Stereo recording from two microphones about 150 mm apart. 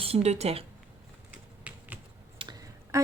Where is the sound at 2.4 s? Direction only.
35° right (ahead or behind).